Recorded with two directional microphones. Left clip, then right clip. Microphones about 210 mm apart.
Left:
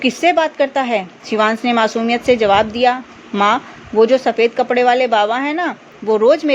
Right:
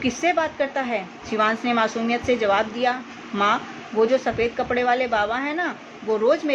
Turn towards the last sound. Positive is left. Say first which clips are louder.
# left 8 dB
turn(degrees=40)  # may be behind; listen again after turning